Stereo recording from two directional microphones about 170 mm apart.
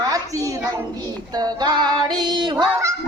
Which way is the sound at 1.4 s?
25° right (ahead or behind).